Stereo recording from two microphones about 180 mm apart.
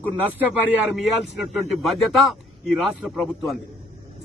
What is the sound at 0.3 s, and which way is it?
A man's voice, 10° right (ahead or behind).